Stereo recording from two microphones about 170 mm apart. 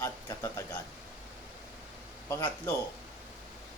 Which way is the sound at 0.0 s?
15° left (ahead or behind).